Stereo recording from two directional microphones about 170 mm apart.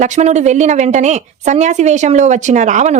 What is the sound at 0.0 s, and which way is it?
A woman's voice, 45° right (ahead or behind).